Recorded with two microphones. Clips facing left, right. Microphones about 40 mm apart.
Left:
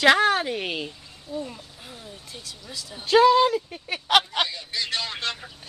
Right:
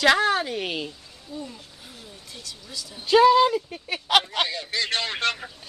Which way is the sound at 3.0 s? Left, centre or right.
Centre.